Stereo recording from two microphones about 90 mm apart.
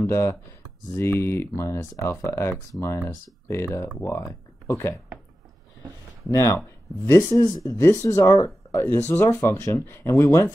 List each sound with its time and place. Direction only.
0.0 s speech: 30° left (ahead or behind)
6.2 s speech: 35° left (ahead or behind)
7.7 s speech: 30° left (ahead or behind)
8.7 s speech: 25° left (ahead or behind)